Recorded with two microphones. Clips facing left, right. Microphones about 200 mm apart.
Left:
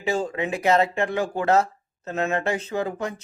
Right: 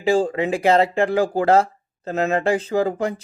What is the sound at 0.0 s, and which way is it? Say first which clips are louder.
Speech: right 6 dB; 30° right (ahead or behind).